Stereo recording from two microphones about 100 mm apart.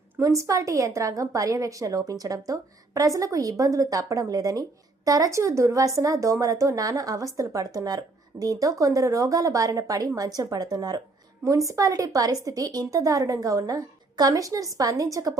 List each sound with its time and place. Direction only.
0.2 s speech: 30° right (ahead or behind)